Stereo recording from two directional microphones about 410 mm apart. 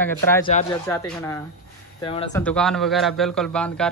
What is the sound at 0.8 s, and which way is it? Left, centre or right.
Speech, centre.